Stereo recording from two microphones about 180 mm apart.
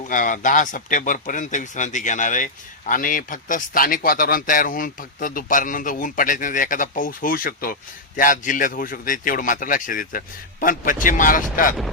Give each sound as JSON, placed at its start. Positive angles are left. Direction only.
{"t": 0.1, "sound": "speech", "side_deg": 45}